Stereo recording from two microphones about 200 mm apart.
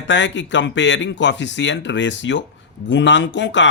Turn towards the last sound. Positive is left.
turn(degrees=65)  # may be behind; listen again after turning